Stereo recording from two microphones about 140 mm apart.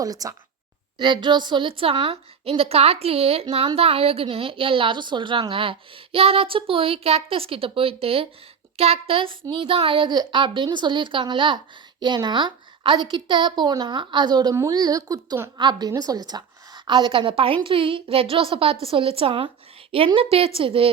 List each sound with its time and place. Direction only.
0.0 s a woman's voice: 25° right (ahead or behind); by 20.9 s 40° right (ahead or behind)